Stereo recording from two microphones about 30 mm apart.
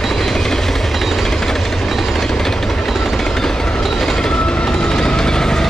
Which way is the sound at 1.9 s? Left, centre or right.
Centre.